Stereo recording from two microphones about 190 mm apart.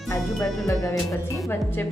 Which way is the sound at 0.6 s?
15° left (ahead or behind).